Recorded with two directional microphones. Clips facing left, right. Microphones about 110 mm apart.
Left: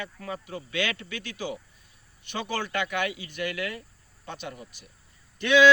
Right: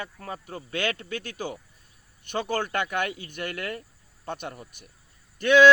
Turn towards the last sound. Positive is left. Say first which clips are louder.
# right 2 dB
turn(degrees=-45)  # may be behind; listen again after turning